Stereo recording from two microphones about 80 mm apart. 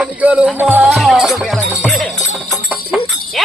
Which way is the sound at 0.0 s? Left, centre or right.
Centre.